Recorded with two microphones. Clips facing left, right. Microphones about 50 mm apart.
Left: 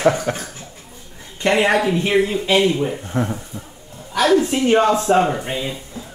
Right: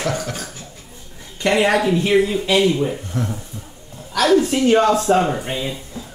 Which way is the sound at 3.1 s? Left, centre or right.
Left.